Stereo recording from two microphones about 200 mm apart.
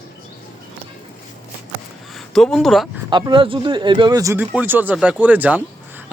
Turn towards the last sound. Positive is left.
turn(degrees=-10)  # may be behind; listen again after turning